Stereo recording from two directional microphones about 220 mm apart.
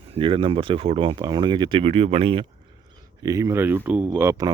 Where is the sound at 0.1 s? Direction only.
25° right (ahead or behind).